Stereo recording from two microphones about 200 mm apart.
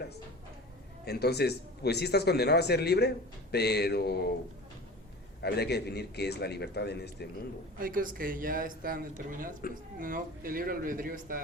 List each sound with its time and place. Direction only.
1.0 s a man's voice: 55° left (ahead or behind)
5.4 s a man's voice: 55° left (ahead or behind)
7.8 s speech: 45° right (ahead or behind)